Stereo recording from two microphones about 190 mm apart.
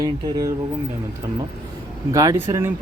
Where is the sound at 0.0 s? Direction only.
20° right (ahead or behind).